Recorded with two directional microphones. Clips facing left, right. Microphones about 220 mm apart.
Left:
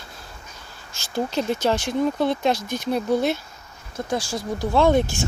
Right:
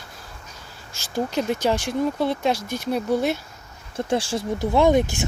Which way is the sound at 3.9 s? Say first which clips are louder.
Right 3 dB; 30° right (ahead or behind).